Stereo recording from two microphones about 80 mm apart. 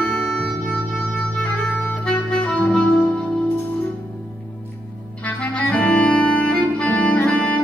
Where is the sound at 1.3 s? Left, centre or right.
Centre.